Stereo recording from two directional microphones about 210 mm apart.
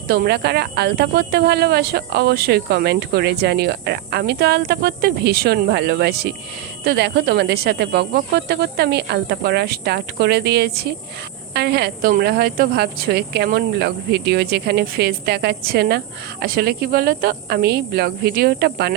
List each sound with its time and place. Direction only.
0.1 s speech: 50° right (ahead or behind)